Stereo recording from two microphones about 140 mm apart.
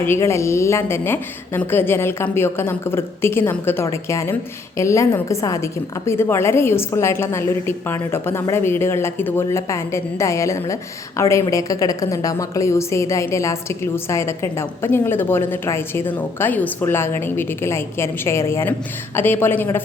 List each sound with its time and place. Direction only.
0.0 s a woman's voice: 20° left (ahead or behind)